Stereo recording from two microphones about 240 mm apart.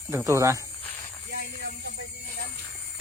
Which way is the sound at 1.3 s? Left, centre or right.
Right.